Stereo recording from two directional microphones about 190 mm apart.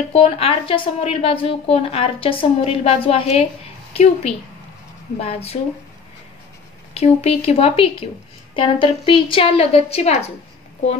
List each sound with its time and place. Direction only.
0.1 s a woman's voice: 30° left (ahead or behind)
6.9 s a woman's voice: 35° left (ahead or behind)